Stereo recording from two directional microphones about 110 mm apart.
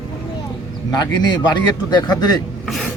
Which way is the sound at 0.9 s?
40° left (ahead or behind).